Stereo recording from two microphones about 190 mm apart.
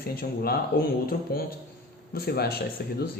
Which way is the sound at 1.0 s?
50° left (ahead or behind).